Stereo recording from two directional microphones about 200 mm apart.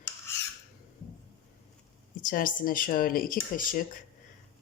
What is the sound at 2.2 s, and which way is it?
Speech, 45° left (ahead or behind).